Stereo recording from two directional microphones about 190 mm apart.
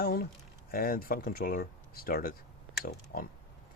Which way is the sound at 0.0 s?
50° left (ahead or behind).